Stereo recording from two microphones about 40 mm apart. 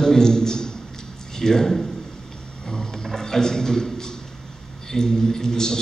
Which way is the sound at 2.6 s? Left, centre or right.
Centre.